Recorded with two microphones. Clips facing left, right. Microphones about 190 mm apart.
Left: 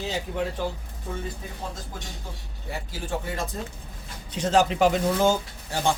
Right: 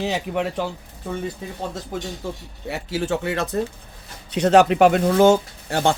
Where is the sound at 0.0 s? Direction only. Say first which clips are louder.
Right 5 dB; 70° right (ahead or behind).